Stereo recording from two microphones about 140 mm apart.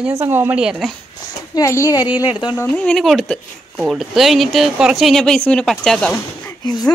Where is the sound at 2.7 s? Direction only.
5° left (ahead or behind).